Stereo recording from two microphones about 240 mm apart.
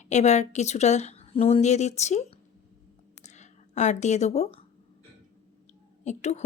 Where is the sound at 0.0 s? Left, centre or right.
Left.